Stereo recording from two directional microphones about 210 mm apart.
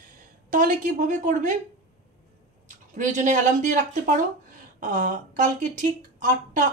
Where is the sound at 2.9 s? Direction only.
35° right (ahead or behind).